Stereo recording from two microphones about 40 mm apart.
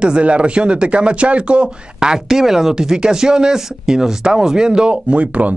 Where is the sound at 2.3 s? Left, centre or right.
Centre; by 5.5 s right.